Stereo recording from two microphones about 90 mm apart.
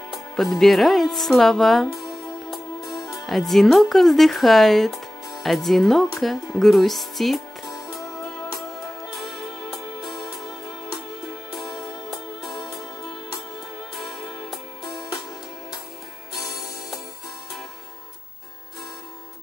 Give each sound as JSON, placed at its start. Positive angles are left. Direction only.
{"t": 0.1, "sound": "speech", "side_deg": 0}
{"t": 2.5, "sound": "music", "side_deg": 0}
{"t": 3.0, "sound": "music", "side_deg": 40}
{"t": 3.3, "sound": "speech", "side_deg": 0}
{"t": 8.0, "sound": "music", "side_deg": 40}
{"t": 9.1, "sound": "music", "side_deg": 0}
{"t": 11.5, "sound": "music", "side_deg": 45}
{"t": 14.9, "sound": "music", "side_deg": 45}